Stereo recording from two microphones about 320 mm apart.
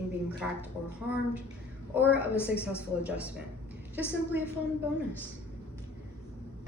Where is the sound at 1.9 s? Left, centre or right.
Centre.